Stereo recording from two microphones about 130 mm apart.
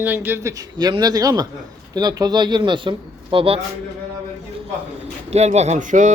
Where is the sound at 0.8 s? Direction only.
30° right (ahead or behind).